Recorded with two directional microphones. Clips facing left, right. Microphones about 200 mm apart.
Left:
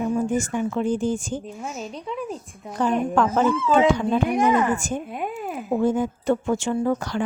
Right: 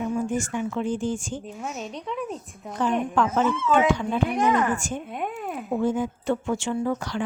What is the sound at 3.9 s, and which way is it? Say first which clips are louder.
Speech: left 4 dB; 40° left (ahead or behind).